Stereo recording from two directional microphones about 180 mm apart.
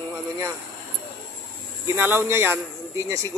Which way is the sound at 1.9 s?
10° right (ahead or behind).